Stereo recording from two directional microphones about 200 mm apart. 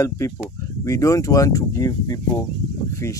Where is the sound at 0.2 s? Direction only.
15° left (ahead or behind).